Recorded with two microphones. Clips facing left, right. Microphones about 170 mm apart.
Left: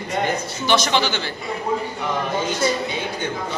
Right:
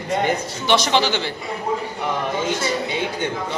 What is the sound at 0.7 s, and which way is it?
Speech, 30° right (ahead or behind).